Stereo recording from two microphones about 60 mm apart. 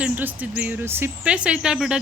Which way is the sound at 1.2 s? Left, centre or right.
Centre.